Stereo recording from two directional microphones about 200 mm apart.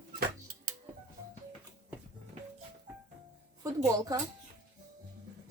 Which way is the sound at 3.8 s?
15° right (ahead or behind).